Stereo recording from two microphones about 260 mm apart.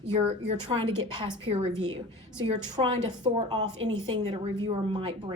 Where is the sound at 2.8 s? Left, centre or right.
Centre.